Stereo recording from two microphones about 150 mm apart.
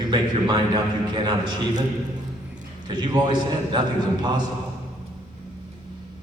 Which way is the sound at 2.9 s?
30° right (ahead or behind).